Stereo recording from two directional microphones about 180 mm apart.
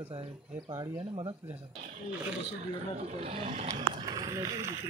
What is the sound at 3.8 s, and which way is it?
Speech, 25° right (ahead or behind).